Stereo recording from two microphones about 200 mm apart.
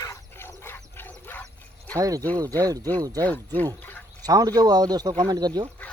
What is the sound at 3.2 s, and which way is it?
Speech, 10° left (ahead or behind).